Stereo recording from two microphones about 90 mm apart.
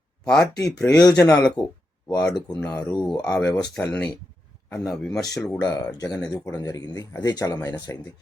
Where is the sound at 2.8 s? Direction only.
5° left (ahead or behind).